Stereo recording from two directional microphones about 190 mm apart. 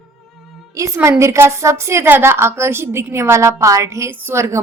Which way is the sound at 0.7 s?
15° right (ahead or behind).